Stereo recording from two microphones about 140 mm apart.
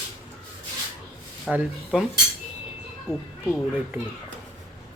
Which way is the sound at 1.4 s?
Centre (ahead or behind).